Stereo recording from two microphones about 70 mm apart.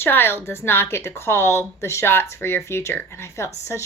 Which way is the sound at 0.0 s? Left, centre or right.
Left.